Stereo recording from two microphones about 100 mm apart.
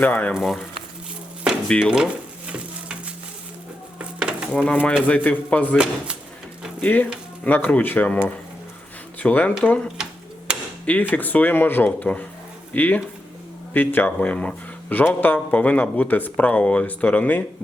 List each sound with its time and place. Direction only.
0.0 s speech: 15° left (ahead or behind)
0.3 s speech: centre (ahead or behind)
1.6 s speech: 10° left (ahead or behind)
3.9 s dishes: 10° right (ahead or behind)
4.5 s speech: 10° left (ahead or behind)
5.7 s speech: 10° right (ahead or behind)
6.8 s speech: 15° left (ahead or behind)
11.1 s speech: 15° left (ahead or behind)